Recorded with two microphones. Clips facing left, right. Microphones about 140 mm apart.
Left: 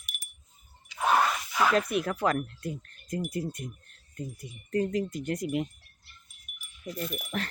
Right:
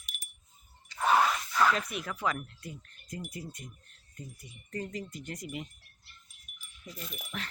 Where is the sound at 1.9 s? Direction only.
55° left (ahead or behind).